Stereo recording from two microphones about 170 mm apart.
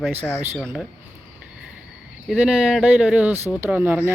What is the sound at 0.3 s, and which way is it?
Speech, 5° left (ahead or behind).